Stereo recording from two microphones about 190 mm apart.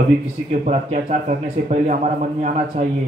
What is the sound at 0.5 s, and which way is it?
Speech, 35° right (ahead or behind).